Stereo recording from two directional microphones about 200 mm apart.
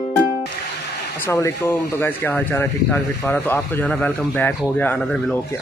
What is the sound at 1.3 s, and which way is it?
Speech, 15° left (ahead or behind).